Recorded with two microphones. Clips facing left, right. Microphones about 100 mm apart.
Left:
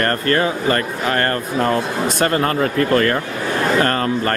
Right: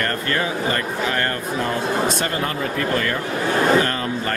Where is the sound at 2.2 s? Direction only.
50° left (ahead or behind).